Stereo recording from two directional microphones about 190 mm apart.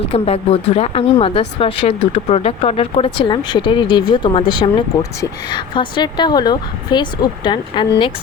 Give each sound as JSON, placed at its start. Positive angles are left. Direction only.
{"t": 0.1, "sound": "a woman's voice", "side_deg": 30}